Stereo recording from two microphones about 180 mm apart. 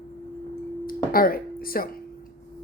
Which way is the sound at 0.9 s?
55° left (ahead or behind).